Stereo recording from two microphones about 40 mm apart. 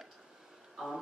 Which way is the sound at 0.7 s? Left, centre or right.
Centre.